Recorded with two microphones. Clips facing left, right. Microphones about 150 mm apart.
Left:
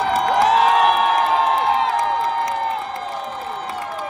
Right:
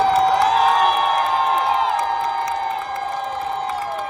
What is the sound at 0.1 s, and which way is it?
Crowd, 35° right (ahead or behind).